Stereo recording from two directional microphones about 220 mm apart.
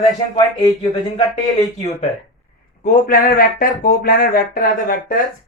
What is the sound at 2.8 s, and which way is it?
Speech, 40° left (ahead or behind).